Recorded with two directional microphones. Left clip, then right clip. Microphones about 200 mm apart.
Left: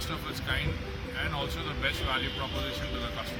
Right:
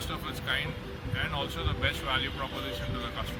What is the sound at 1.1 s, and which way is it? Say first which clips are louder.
Speech: right 1 dB; 5° right (ahead or behind).